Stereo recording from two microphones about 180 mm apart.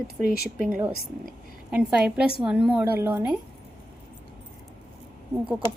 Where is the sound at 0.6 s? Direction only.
5° right (ahead or behind).